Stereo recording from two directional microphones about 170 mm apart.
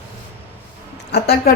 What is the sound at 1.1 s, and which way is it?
Speech, 70° left (ahead or behind).